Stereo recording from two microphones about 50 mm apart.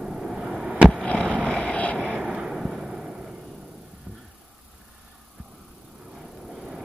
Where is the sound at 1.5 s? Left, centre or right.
Centre.